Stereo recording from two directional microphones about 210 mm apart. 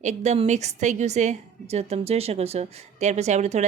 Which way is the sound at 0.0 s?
35° right (ahead or behind).